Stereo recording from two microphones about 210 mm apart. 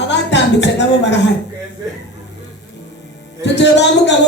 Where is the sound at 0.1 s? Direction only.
55° left (ahead or behind).